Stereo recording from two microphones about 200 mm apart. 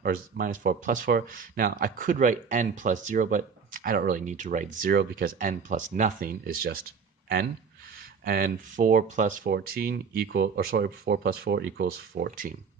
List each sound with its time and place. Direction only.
0.0 s speech: 45° right (ahead or behind)
8.2 s speech: 45° right (ahead or behind)